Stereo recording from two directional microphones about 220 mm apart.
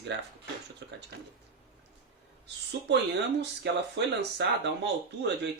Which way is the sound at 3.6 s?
55° right (ahead or behind).